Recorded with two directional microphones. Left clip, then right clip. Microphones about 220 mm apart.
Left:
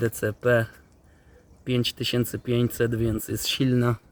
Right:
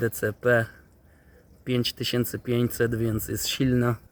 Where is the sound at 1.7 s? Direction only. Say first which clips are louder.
Left 1 dB; 10° left (ahead or behind).